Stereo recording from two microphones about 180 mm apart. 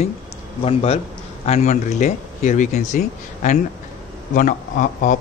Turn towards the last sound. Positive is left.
turn(degrees=45)  # may be behind; listen again after turning